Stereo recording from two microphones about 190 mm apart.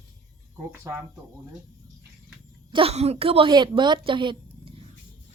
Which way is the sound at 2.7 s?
30° right (ahead or behind).